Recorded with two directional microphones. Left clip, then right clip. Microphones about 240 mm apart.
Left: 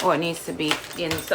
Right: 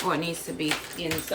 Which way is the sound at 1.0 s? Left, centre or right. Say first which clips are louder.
Left 4 dB; left.